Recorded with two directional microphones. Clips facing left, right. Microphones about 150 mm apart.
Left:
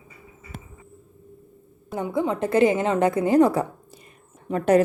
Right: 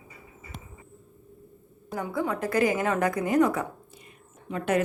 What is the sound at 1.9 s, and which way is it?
A woman's voice, 20° left (ahead or behind).